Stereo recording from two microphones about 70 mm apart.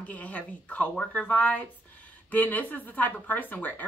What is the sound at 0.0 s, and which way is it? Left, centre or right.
Speech, left.